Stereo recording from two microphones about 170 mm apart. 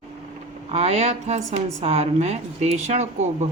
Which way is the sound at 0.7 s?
35° right (ahead or behind).